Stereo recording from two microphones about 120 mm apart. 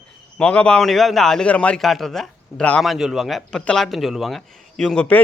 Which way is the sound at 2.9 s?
5° right (ahead or behind).